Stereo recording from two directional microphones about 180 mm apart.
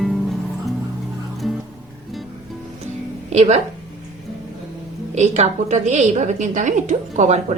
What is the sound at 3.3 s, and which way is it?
Speech, 35° right (ahead or behind).